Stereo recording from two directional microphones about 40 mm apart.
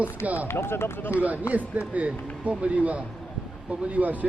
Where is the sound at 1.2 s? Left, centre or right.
Right.